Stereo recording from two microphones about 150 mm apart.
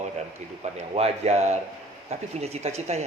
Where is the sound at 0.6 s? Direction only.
45° right (ahead or behind).